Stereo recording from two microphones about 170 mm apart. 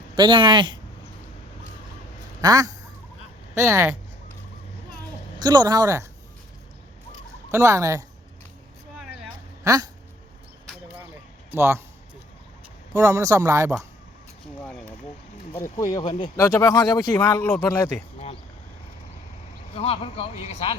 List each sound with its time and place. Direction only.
0.2 s speech: 30° right (ahead or behind)
2.4 s speech: 20° right (ahead or behind)
5.4 s speech: 25° right (ahead or behind)
7.5 s speech: 15° right (ahead or behind)
9.6 s speech: 20° right (ahead or behind)
11.5 s speech: 15° right (ahead or behind)
12.9 s speech: 15° right (ahead or behind)
14.7 s vehicle: 5° left (ahead or behind)
15.8 s speech: 25° left (ahead or behind)
19.7 s speech: 35° left (ahead or behind)